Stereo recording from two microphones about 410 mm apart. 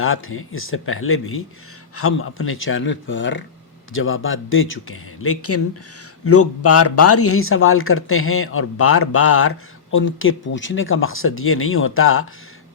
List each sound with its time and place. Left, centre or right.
0.0 s speech: left